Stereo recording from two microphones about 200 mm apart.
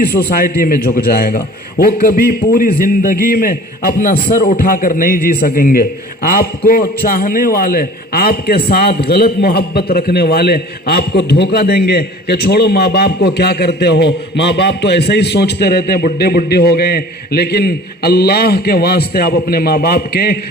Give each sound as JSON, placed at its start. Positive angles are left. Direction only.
{"t": 0.0, "sound": "a man's voice", "side_deg": 50}